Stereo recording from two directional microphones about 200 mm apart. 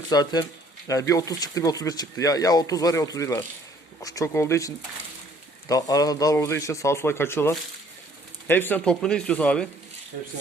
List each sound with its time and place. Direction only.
0.1 s speech: 20° left (ahead or behind)